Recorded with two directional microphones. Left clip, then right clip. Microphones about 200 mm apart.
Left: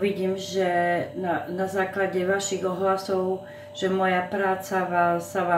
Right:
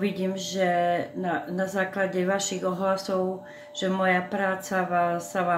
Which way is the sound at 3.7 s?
45° right (ahead or behind).